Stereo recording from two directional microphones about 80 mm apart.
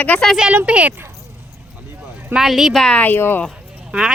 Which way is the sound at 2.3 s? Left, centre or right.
Centre.